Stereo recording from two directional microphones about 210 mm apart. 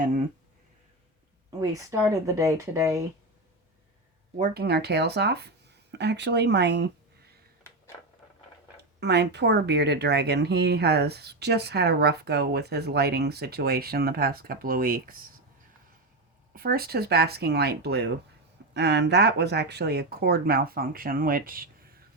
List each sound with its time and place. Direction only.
1.5 s speech: 15° right (ahead or behind)
4.4 s speech: 45° right (ahead or behind)
9.0 s speech: 50° right (ahead or behind)
16.6 s speech: 45° right (ahead or behind)